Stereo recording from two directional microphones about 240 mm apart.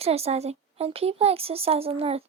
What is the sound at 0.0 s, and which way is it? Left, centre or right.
Speech, right.